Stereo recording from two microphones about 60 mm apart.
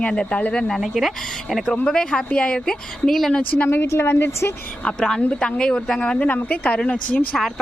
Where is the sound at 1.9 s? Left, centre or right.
Centre.